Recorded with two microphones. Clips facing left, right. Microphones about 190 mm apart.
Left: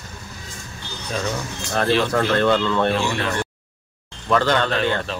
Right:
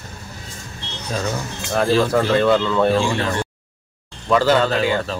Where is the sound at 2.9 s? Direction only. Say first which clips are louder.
Right 3 dB; 30° right (ahead or behind).